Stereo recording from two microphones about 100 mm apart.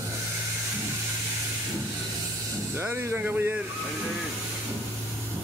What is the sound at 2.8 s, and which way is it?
Speech, 25° right (ahead or behind).